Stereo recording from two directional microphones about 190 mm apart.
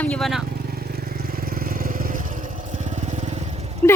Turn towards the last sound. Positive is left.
turn(degrees=-35)  # may be behind; listen again after turning